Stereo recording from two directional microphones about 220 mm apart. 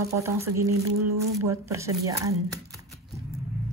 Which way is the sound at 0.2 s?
10° right (ahead or behind).